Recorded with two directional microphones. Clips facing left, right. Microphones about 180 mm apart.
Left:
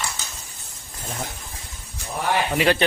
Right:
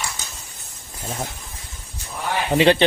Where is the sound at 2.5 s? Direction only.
25° right (ahead or behind).